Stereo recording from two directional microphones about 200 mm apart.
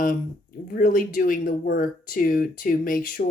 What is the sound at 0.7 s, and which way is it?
Speech, 45° left (ahead or behind).